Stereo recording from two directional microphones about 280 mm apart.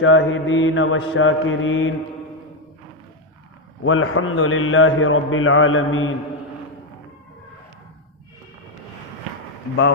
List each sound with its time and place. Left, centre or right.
0.0 s a man's voice: left
3.8 s a man's voice: left